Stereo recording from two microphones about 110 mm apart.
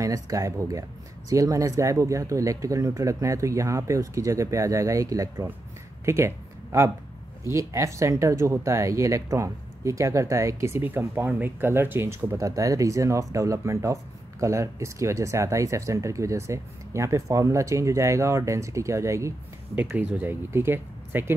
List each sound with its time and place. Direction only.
0.0 s speech: 30° right (ahead or behind)
19.7 s speech: 15° right (ahead or behind)